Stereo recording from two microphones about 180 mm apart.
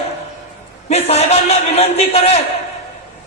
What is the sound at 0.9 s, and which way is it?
A man's voice, 35° left (ahead or behind).